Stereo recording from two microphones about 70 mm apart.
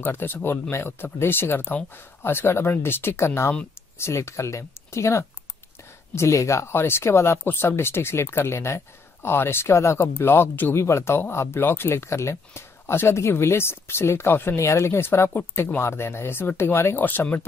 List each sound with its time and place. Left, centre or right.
0.0 s speech: left
10.7 s speech: left